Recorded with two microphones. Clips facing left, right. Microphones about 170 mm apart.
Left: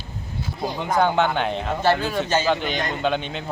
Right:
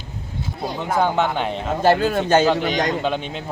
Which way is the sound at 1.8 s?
45° right (ahead or behind).